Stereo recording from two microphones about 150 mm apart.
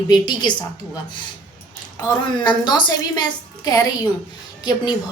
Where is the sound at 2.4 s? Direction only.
30° left (ahead or behind).